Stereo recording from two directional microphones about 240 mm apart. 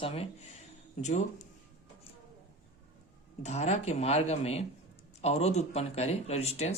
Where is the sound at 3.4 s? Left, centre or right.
Left.